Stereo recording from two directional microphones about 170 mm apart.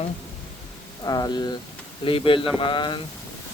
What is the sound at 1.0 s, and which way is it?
Speech, 25° left (ahead or behind).